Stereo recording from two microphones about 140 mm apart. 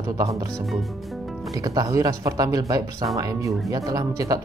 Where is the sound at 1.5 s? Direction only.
25° right (ahead or behind).